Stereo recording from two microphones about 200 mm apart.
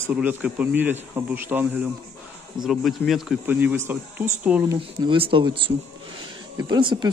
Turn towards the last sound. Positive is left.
turn(degrees=-20)  # may be behind; listen again after turning